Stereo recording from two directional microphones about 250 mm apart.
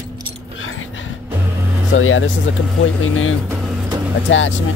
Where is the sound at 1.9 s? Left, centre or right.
Left.